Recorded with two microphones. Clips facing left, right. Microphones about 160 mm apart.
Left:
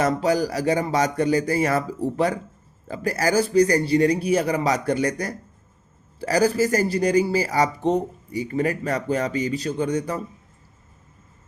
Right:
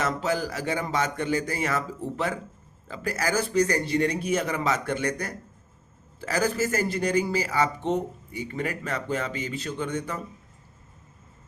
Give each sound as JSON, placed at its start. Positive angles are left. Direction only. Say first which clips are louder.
{"t": 0.0, "sound": "speech", "louder": "left 6 dB", "side_deg": 40}